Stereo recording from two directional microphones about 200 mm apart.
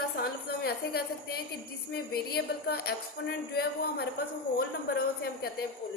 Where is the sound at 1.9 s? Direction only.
50° left (ahead or behind).